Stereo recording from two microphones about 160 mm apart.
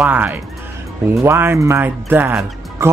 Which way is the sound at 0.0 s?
10° right (ahead or behind).